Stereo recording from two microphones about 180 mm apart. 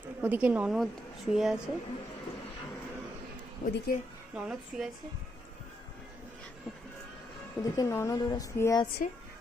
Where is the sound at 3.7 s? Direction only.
55° left (ahead or behind).